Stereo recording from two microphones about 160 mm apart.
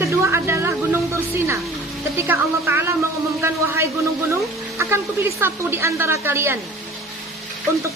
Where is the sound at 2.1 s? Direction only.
15° right (ahead or behind).